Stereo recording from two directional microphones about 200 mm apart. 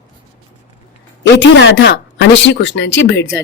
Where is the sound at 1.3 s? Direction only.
65° left (ahead or behind).